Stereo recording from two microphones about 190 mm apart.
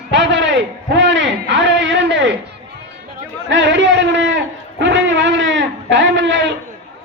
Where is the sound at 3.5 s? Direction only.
70° right (ahead or behind).